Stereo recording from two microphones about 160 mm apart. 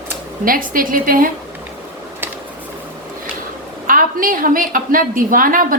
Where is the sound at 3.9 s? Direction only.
60° right (ahead or behind).